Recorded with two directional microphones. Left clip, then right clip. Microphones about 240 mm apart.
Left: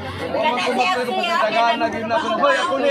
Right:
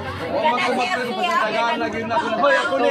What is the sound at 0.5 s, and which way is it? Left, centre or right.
Speech, left.